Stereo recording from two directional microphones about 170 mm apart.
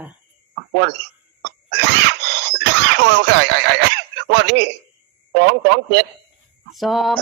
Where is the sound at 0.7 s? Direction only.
90° right.